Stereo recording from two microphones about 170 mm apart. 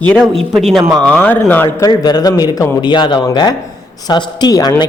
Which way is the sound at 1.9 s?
25° left (ahead or behind).